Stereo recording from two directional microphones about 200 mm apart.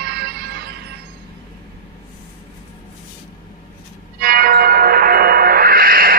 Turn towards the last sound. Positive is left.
turn(degrees=-45)  # may be behind; listen again after turning